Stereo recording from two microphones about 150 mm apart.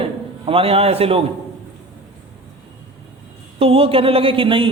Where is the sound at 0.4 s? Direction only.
40° right (ahead or behind).